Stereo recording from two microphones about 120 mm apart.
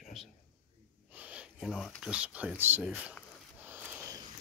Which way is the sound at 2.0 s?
10° right (ahead or behind).